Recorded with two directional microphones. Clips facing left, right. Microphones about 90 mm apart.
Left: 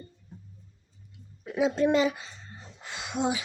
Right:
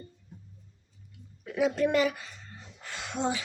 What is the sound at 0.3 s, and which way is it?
Music, 30° left (ahead or behind).